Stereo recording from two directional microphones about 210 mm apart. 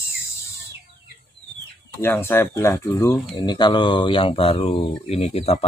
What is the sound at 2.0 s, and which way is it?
Speech, 10° left (ahead or behind).